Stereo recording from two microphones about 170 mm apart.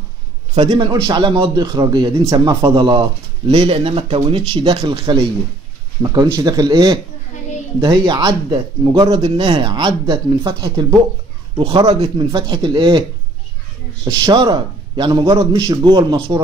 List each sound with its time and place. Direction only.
0.7 s a man's voice: 30° right (ahead or behind)
11.9 s speech: 35° right (ahead or behind)
12.3 s a man's voice: 20° right (ahead or behind)
14.0 s a man's voice: 25° right (ahead or behind)